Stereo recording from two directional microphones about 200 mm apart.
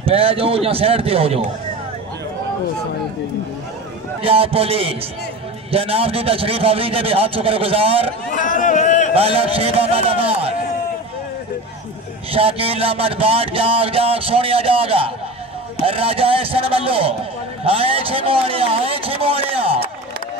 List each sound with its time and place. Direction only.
0.0 s a man's voice: 30° right (ahead or behind)
4.2 s a man's voice: 30° right (ahead or behind)
8.4 s a sound: 40° left (ahead or behind)
9.1 s a man's voice: 30° right (ahead or behind)
12.3 s a man's voice: 30° right (ahead or behind)